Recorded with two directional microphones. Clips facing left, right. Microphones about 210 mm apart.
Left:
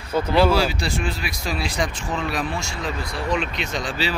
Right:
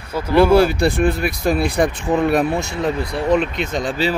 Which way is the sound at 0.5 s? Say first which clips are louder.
Right 8 dB; 55° right (ahead or behind).